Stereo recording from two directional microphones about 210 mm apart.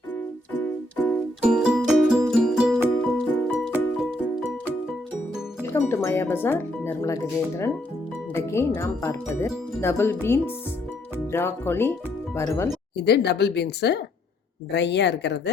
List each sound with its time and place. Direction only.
0.6 s keyboard: 10° left (ahead or behind)
1.4 s music: 5° right (ahead or behind)
5.6 s speech: 10° left (ahead or behind)
8.4 s speech: 10° left (ahead or behind)
13.1 s speech: 55° left (ahead or behind)